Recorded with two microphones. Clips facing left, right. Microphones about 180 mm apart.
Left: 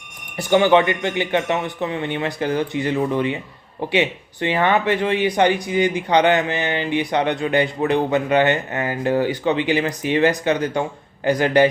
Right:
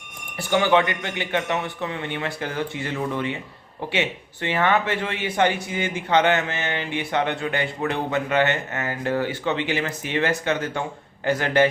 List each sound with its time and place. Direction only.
0.3 s a man's voice: 20° left (ahead or behind)